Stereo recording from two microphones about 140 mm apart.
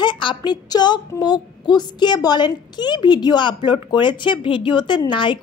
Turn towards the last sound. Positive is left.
turn(degrees=35)  # may be behind; listen again after turning